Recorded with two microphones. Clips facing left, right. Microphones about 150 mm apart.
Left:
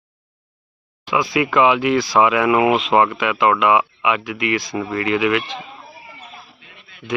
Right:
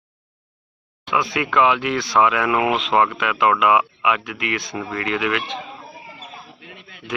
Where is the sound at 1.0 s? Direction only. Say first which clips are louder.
Left 3 dB; centre (ahead or behind).